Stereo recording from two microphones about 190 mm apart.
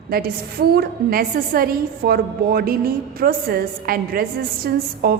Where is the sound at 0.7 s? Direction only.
50° right (ahead or behind).